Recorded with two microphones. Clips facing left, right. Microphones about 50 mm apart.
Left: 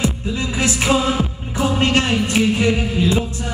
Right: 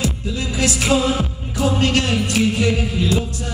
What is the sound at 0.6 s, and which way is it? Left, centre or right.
Music, left.